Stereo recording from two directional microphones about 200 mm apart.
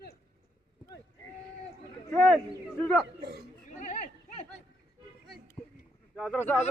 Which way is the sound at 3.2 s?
50° right (ahead or behind).